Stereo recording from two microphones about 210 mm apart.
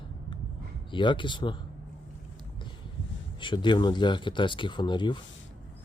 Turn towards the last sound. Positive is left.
turn(degrees=20)  # may be behind; listen again after turning